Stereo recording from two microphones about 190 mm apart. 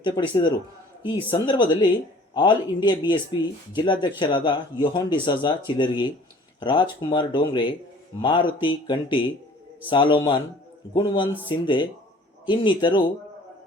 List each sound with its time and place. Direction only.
0.0 s a man's voice: 25° left (ahead or behind)